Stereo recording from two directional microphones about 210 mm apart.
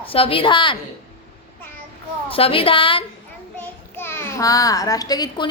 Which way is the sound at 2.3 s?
25° left (ahead or behind).